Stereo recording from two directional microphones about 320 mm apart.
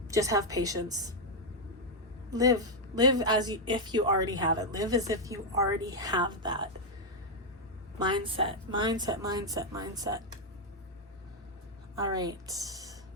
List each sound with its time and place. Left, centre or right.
0.1 s speech: centre
2.3 s speech: centre
7.9 s speech: centre
11.9 s speech: centre